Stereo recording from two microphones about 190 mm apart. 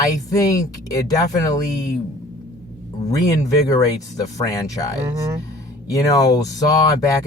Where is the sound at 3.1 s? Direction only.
20° left (ahead or behind).